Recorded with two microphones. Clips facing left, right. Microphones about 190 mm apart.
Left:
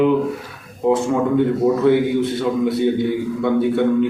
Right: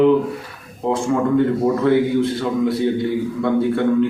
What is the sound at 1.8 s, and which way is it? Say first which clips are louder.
A man's voice: even; centre (ahead or behind).